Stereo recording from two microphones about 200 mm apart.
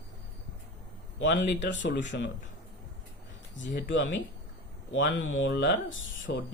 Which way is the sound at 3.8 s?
70° left (ahead or behind).